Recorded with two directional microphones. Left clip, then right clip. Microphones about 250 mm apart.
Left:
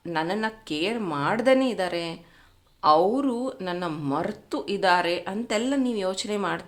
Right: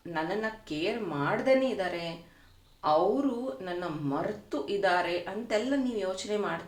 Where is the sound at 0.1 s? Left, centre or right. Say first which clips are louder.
Left 5 dB; left.